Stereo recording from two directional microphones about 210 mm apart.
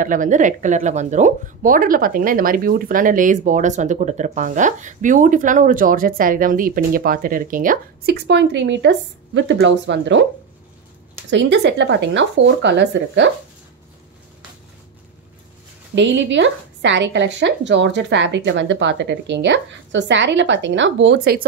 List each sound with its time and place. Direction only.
0.0 s speech: 40° right (ahead or behind); by 10.2 s 60° right (ahead or behind)
11.2 s speech: 55° right (ahead or behind)
15.9 s speech: 60° right (ahead or behind)